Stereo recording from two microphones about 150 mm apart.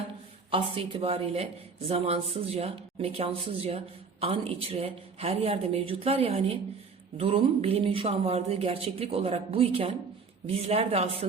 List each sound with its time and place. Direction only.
0.5 s speech: 40° right (ahead or behind)